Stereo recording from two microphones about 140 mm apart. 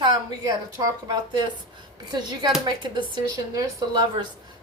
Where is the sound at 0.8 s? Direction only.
30° right (ahead or behind).